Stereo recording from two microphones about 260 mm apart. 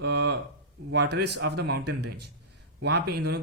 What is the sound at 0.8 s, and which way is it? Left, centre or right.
Speech, right.